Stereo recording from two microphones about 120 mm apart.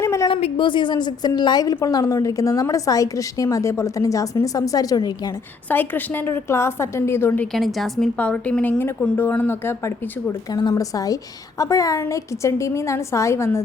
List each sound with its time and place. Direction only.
0.0 s a sound: 25° left (ahead or behind)
0.5 s a woman's voice: 45° left (ahead or behind)
5.6 s a woman's voice: 15° left (ahead or behind)
7.5 s a woman's voice: centre (ahead or behind); by 10.1 s 20° left (ahead or behind)
10.5 s a woman's voice: 35° left (ahead or behind)